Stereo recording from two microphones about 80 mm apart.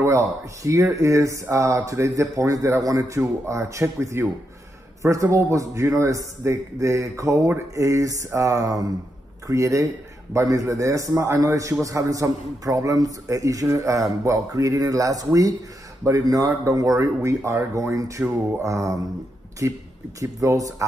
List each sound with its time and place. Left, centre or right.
0.0 s a man's voice: right